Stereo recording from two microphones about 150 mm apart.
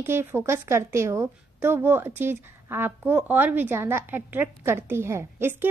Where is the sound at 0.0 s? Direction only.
15° right (ahead or behind).